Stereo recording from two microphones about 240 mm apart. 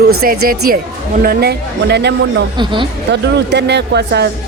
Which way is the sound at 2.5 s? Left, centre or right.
Centre.